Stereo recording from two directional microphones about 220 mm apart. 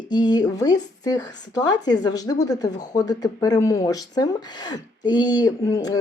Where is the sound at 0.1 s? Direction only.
20° left (ahead or behind).